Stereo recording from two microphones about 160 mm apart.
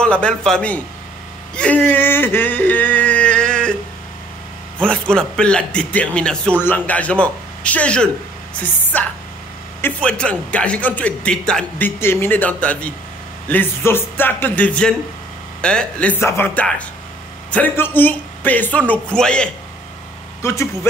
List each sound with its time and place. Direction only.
0.0 s a man's voice: 5° left (ahead or behind)
4.7 s a man's voice: 5° left (ahead or behind)
20.4 s a man's voice: 15° left (ahead or behind)